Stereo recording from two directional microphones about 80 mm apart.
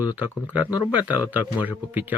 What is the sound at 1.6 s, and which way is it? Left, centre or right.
Speech, right.